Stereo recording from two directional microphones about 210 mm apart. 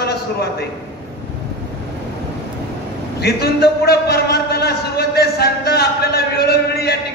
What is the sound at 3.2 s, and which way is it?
A man's voice, 50° left (ahead or behind).